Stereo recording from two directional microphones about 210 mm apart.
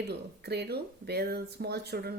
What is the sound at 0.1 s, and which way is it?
A woman's voice, 50° right (ahead or behind).